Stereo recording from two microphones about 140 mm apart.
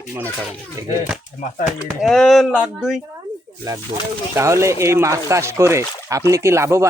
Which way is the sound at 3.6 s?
25° right (ahead or behind).